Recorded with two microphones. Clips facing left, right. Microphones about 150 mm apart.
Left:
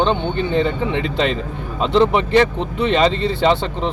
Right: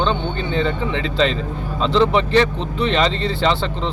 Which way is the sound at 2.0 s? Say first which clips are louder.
Left 1 dB; 15° left (ahead or behind).